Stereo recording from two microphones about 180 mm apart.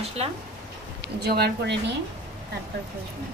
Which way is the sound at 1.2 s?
65° right (ahead or behind).